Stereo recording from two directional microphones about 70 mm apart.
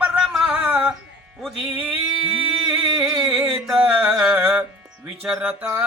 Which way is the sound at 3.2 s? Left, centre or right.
Centre.